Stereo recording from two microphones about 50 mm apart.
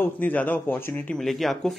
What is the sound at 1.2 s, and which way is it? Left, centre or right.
Speech, centre.